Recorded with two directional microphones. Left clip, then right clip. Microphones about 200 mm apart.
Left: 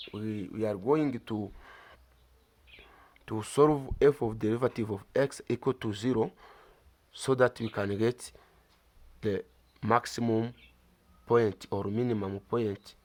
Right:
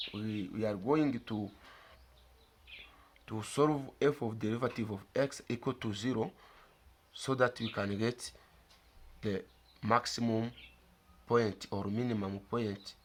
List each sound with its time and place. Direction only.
0.1 s speech: 50° left (ahead or behind)
3.2 s speech: 50° left (ahead or behind)